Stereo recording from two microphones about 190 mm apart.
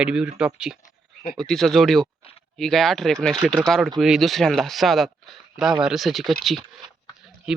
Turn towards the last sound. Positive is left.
turn(degrees=0)  # may be behind; listen again after turning